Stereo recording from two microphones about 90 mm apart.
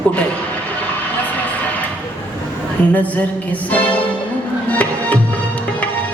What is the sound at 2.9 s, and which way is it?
Music, 15° left (ahead or behind).